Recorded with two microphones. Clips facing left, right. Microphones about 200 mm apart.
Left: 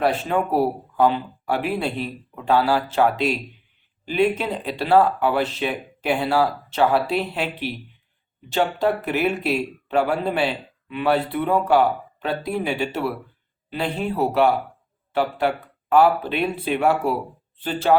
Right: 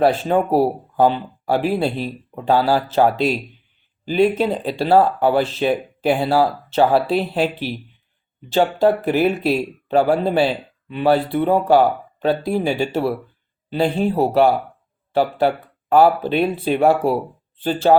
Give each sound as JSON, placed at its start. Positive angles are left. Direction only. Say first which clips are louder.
{"t": 0.0, "sound": "speech", "louder": "right 5 dB", "side_deg": -35}